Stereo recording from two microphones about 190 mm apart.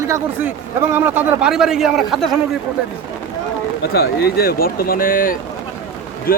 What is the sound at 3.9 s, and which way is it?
Speech, 55° left (ahead or behind).